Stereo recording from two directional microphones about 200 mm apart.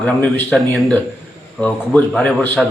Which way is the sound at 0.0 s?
10° left (ahead or behind).